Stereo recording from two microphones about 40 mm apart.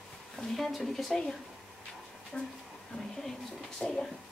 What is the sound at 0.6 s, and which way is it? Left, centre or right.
Speech, centre.